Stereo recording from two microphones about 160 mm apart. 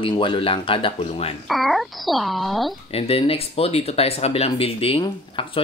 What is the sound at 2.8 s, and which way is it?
Speech, 40° left (ahead or behind).